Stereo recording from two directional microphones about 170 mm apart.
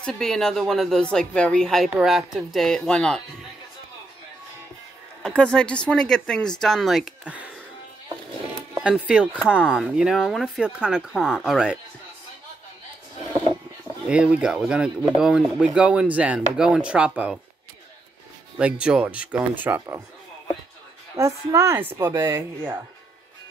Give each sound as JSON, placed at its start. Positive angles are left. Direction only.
{"t": 0.0, "sound": "speech", "side_deg": 5}
{"t": 5.2, "sound": "speech", "side_deg": 5}
{"t": 8.8, "sound": "speech", "side_deg": -5}
{"t": 14.0, "sound": "speech", "side_deg": -5}
{"t": 18.6, "sound": "a woman's voice", "side_deg": -5}
{"t": 21.2, "sound": "a woman's voice", "side_deg": -15}